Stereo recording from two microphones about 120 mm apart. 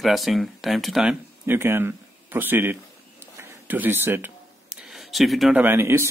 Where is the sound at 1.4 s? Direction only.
20° right (ahead or behind).